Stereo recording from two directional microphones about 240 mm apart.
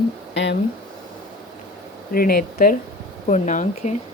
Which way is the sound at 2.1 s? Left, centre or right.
Left.